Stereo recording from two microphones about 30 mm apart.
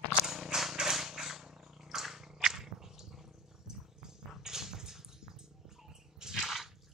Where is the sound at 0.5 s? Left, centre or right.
Right.